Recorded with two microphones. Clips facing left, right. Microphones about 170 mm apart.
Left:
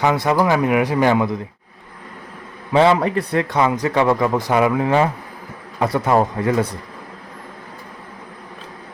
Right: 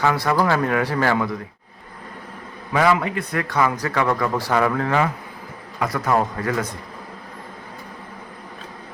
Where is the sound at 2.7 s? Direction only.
25° left (ahead or behind).